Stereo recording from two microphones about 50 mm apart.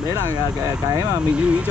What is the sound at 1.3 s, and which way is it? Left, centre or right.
Speech, right.